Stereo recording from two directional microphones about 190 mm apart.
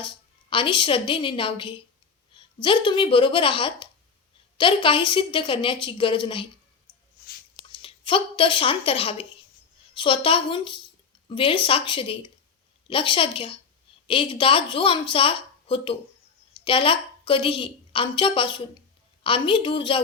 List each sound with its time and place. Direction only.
0.5 s a woman's voice: 25° left (ahead or behind)
7.7 s a woman's voice: 25° left (ahead or behind)